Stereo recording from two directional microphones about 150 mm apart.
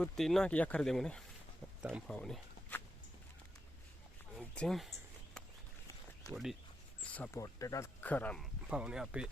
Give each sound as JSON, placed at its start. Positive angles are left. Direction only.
{"t": 0.0, "sound": "speech", "side_deg": 0}
{"t": 4.5, "sound": "a sound", "side_deg": 0}
{"t": 6.3, "sound": "speech", "side_deg": 0}
{"t": 7.0, "sound": "a sound", "side_deg": 10}
{"t": 7.3, "sound": "speech", "side_deg": 20}
{"t": 8.0, "sound": "speech", "side_deg": 10}
{"t": 8.6, "sound": "speech", "side_deg": -5}